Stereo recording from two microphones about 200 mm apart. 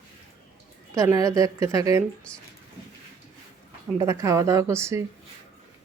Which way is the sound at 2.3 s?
5° left (ahead or behind).